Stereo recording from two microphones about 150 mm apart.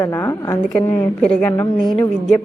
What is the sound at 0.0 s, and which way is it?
A woman's voice, 20° left (ahead or behind).